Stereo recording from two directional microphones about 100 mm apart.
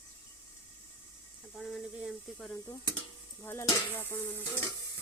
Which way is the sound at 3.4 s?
25° left (ahead or behind).